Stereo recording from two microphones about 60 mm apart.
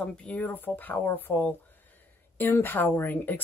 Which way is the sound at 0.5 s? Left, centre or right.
Left.